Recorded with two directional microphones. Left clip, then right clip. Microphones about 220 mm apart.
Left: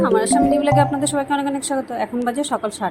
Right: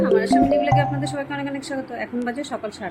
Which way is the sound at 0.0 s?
15° left (ahead or behind).